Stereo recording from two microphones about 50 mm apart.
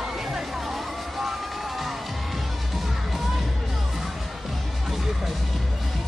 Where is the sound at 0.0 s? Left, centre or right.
Centre.